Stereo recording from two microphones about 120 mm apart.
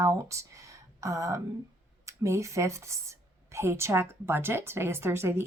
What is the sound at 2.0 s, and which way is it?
Speech, 25° right (ahead or behind).